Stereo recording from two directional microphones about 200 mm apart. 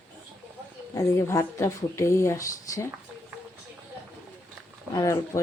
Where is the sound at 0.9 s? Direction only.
15° left (ahead or behind).